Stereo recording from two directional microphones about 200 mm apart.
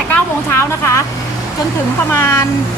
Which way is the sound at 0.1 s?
15° left (ahead or behind).